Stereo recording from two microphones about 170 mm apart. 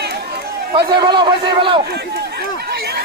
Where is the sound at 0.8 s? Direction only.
25° right (ahead or behind).